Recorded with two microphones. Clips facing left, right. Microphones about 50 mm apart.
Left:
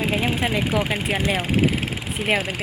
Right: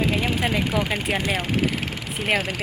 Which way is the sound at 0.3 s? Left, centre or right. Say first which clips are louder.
Left 1 dB; centre.